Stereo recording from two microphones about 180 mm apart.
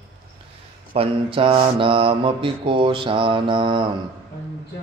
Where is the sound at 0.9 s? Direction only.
30° right (ahead or behind).